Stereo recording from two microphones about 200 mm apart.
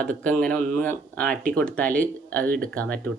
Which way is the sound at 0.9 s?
10° left (ahead or behind).